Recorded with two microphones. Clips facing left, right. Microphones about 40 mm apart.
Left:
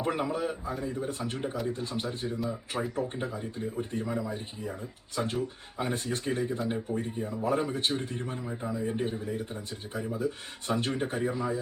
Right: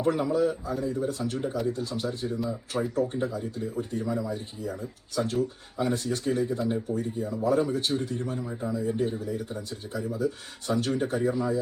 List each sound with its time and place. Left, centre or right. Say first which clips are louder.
0.0 s speech: right 5 dB; left